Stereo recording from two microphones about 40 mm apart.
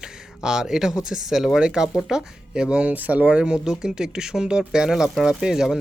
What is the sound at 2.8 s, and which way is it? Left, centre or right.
Speech, right.